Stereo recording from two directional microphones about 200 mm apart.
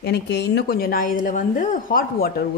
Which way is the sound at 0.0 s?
55° left (ahead or behind).